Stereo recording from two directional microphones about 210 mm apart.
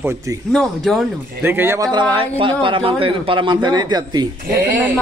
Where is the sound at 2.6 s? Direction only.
25° right (ahead or behind).